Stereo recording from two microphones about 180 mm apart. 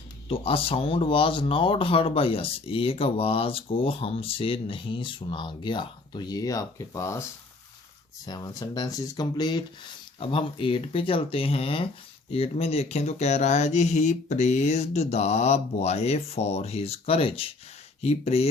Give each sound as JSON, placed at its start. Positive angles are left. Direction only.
{"t": 0.3, "sound": "speech", "side_deg": 30}
{"t": 8.3, "sound": "speech", "side_deg": 20}